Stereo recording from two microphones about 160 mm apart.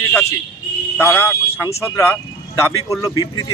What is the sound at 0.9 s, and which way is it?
Speech, 15° left (ahead or behind).